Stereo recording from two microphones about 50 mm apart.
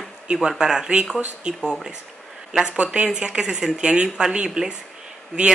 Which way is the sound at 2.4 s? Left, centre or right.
Centre.